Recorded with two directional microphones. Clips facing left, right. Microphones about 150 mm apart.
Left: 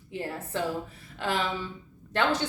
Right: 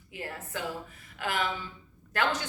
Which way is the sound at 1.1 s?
30° left (ahead or behind).